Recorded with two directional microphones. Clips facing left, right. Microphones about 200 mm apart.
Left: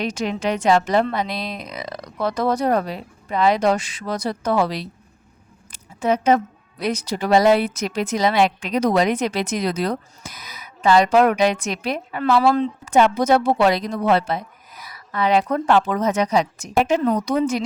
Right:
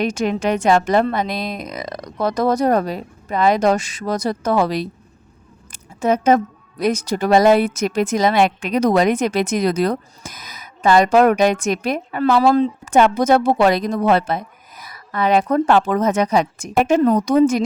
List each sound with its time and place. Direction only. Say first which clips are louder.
0.0 s a woman's voice: right 4 dB; 50° right (ahead or behind)